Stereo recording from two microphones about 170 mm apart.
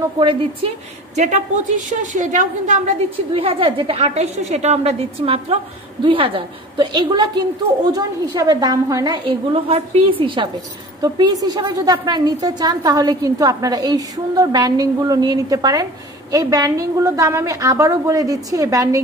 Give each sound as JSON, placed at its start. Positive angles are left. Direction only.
{"t": 0.2, "sound": "a woman's voice", "side_deg": -30}
{"t": 1.1, "sound": "a woman's voice", "side_deg": -45}
{"t": 3.3, "sound": "a woman's voice", "side_deg": -30}